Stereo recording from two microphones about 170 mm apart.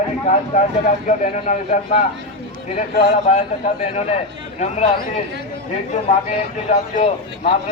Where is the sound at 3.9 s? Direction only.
40° left (ahead or behind).